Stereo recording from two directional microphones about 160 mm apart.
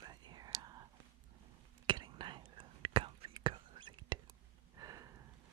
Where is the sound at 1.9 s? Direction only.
30° right (ahead or behind).